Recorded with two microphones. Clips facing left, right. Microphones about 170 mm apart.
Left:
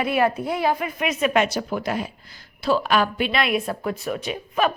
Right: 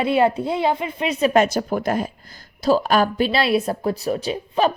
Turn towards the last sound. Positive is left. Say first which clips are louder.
# right 3 dB
turn(degrees=-30)  # may be behind; listen again after turning